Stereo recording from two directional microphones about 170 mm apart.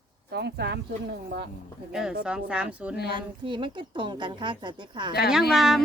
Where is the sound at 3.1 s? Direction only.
30° right (ahead or behind).